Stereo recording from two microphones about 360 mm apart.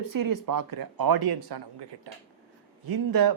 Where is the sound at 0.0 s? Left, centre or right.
Right.